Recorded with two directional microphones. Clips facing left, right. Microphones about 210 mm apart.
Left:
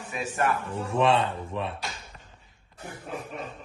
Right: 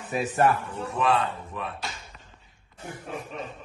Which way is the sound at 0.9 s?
25° left (ahead or behind).